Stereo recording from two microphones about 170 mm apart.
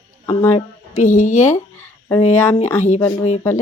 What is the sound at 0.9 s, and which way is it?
Speech, 45° left (ahead or behind).